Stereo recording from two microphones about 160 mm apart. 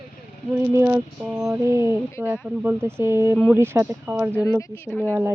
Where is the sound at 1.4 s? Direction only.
15° right (ahead or behind).